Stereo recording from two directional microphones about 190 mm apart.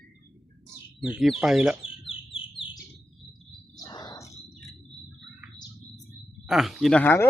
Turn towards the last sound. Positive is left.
turn(degrees=10)  # may be behind; listen again after turning